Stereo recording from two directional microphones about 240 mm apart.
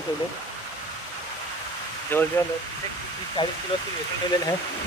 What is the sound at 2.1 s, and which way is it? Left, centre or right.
Speech, centre.